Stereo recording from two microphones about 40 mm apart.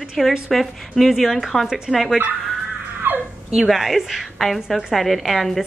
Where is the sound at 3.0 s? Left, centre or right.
Right.